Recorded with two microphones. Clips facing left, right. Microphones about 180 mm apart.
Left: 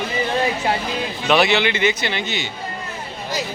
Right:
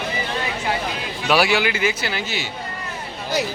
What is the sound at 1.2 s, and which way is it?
A man's voice, 5° right (ahead or behind).